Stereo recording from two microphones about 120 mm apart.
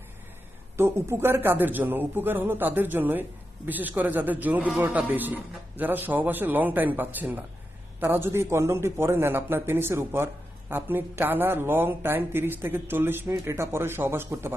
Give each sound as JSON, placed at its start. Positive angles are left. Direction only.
{"t": 0.8, "sound": "a man's voice", "side_deg": -20}